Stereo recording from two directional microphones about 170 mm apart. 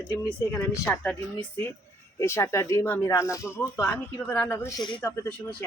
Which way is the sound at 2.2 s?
15° left (ahead or behind).